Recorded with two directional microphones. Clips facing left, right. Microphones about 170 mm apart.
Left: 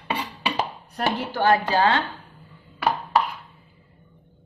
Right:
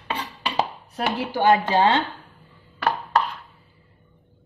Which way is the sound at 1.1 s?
15° right (ahead or behind).